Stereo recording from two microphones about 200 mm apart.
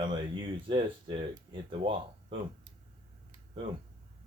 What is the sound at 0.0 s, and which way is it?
Speech, 25° right (ahead or behind).